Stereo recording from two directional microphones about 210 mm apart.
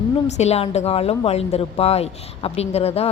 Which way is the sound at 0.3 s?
30° left (ahead or behind).